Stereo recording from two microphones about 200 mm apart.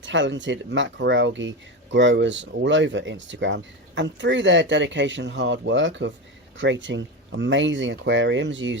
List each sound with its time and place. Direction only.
0.0 s speech: 65° right (ahead or behind)